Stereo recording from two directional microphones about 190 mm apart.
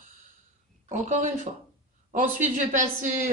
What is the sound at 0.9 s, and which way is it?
Speech, 40° right (ahead or behind).